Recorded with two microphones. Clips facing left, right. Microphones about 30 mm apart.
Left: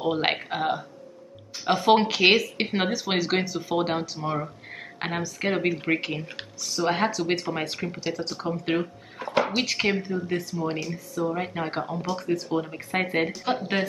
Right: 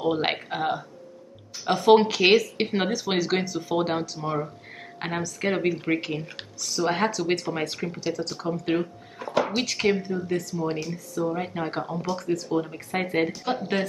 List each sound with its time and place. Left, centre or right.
0.0 s speech: centre
10.7 s speech: centre